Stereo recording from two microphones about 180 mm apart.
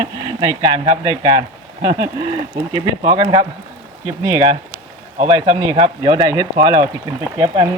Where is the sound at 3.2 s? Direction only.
25° right (ahead or behind).